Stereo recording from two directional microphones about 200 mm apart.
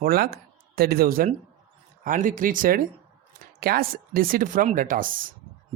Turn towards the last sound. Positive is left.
turn(degrees=-45)  # may be behind; listen again after turning